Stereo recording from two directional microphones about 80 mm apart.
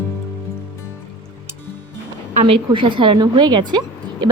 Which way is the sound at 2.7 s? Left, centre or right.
Right.